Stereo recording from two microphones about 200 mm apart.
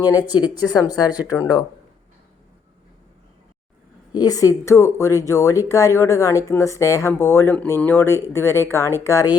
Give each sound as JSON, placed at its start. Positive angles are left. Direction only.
{"t": 0.3, "sound": "speech", "side_deg": 20}
{"t": 4.1, "sound": "speech", "side_deg": 20}